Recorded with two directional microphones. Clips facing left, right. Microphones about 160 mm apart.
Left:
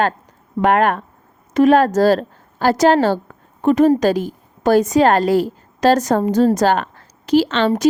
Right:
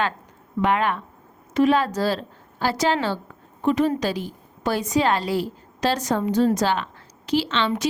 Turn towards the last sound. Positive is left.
turn(degrees=40)  # may be behind; listen again after turning